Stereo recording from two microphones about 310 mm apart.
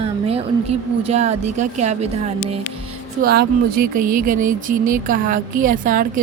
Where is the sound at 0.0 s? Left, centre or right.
Centre.